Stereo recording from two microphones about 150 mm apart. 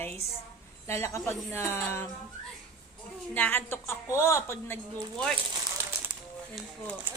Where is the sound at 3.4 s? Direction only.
15° left (ahead or behind).